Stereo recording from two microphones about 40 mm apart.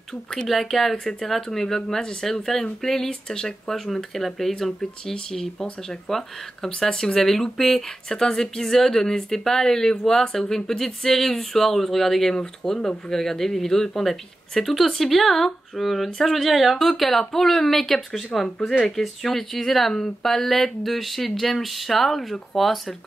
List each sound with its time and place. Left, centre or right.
0.1 s speech: centre
0.5 s speech: centre
8.1 s speech: centre
12.4 s speech: centre